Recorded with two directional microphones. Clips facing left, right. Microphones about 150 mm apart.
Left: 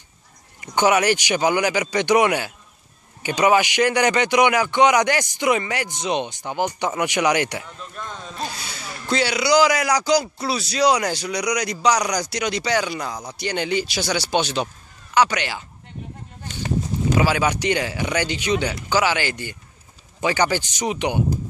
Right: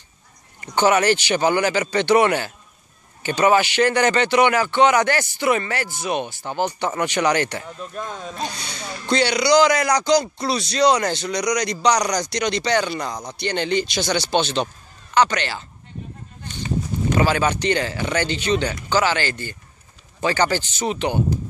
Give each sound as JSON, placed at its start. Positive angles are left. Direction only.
{"t": 0.6, "sound": "speech", "side_deg": 10}
{"t": 7.8, "sound": "speech", "side_deg": -40}
{"t": 8.4, "sound": "speech", "side_deg": 5}
{"t": 17.1, "sound": "speech", "side_deg": 10}